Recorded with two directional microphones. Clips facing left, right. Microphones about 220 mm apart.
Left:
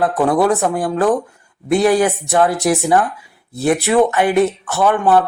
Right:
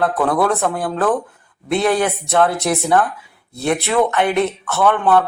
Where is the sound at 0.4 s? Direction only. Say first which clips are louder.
Left 3 dB; 15° left (ahead or behind).